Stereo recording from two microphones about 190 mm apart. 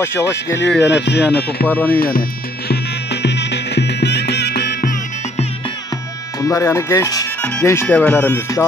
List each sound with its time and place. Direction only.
0.0 s speech: 15° left (ahead or behind)
0.7 s speech: 65° left (ahead or behind)
1.7 s speech: 10° left (ahead or behind)
2.0 s speech: 50° left (ahead or behind)
2.7 s music: 60° left (ahead or behind)
6.4 s speech: 15° left (ahead or behind)